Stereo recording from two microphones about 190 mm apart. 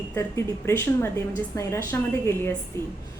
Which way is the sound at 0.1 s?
15° left (ahead or behind).